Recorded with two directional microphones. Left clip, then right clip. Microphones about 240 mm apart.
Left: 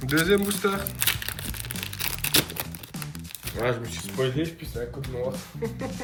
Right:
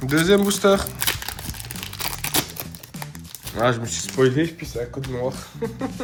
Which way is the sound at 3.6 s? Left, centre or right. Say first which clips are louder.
Right 7 dB; right.